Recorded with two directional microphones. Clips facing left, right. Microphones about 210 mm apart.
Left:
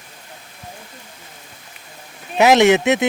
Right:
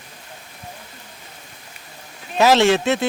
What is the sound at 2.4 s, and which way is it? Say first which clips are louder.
Speech: left 3 dB; 15° left (ahead or behind).